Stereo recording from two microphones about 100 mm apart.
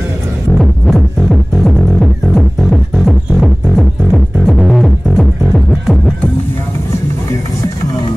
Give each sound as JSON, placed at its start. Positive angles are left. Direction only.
{"t": 0.6, "sound": "music", "side_deg": 0}